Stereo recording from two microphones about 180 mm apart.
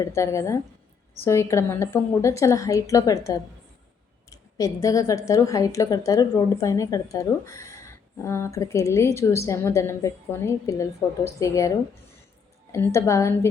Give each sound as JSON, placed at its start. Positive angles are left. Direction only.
{"t": 0.0, "sound": "a woman's voice", "side_deg": 15}
{"t": 12.7, "sound": "a woman's voice", "side_deg": 15}